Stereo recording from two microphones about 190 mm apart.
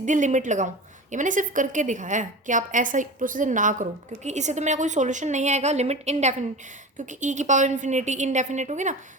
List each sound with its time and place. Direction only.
0.0 s a woman's voice: 40° right (ahead or behind)